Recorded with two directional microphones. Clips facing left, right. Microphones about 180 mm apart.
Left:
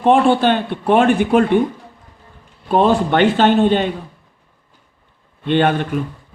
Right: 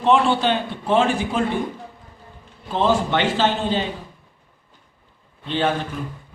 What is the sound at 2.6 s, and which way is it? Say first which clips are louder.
A man's voice: left 5 dB; 60° left (ahead or behind).